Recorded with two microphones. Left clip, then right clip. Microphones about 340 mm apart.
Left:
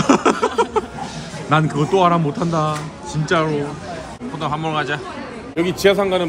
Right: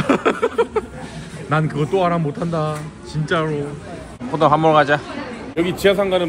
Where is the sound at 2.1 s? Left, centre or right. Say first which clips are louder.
Left 2 dB; left.